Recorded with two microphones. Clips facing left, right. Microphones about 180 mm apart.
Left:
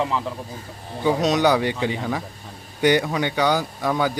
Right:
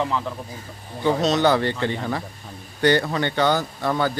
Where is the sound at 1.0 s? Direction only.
15° left (ahead or behind).